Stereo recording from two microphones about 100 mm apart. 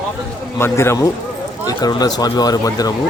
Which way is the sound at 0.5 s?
25° left (ahead or behind).